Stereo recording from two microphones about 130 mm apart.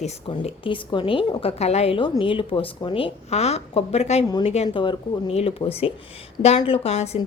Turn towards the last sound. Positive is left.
turn(degrees=55)  # may be behind; listen again after turning